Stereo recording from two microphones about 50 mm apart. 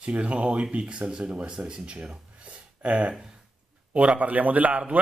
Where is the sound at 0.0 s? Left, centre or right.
Right.